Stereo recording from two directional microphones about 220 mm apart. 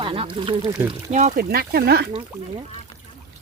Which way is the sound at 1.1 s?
35° right (ahead or behind).